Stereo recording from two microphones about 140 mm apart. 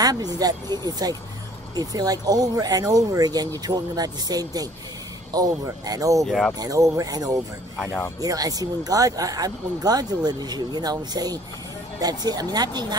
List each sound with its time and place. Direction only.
0.0 s speech: 25° right (ahead or behind)
6.2 s speech: centre (ahead or behind)
6.6 s speech: 25° right (ahead or behind)